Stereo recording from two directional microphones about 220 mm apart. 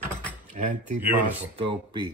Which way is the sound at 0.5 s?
35° right (ahead or behind).